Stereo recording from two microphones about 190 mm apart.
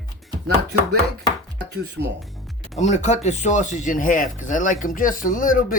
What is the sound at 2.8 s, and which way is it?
Speech, 35° left (ahead or behind).